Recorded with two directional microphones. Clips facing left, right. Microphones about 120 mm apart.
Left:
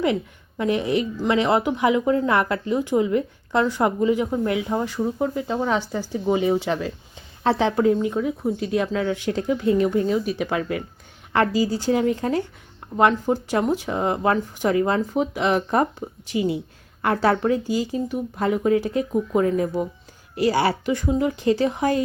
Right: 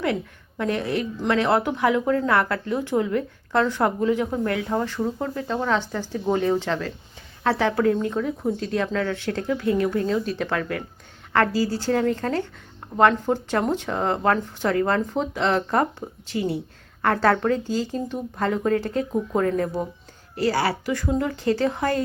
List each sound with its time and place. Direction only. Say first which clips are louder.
0.6 s speech: left 3 dB; 15° left (ahead or behind)